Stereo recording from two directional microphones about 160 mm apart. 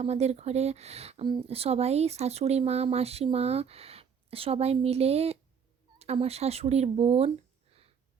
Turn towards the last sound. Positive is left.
turn(degrees=-40)  # may be behind; listen again after turning